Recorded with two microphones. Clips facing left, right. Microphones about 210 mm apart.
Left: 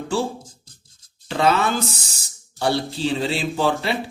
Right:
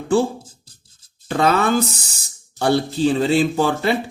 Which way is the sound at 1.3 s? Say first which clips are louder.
Right 2 dB; 45° right (ahead or behind).